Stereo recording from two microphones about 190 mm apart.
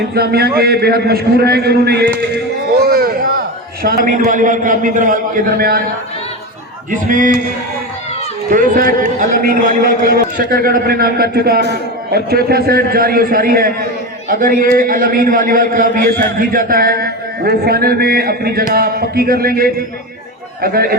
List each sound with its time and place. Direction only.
0.1 s a man's voice: 55° right (ahead or behind)
6.9 s a man's voice: 45° right (ahead or behind)
8.4 s a man's voice: 50° right (ahead or behind)